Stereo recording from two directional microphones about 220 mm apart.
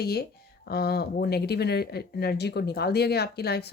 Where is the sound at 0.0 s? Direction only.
45° left (ahead or behind).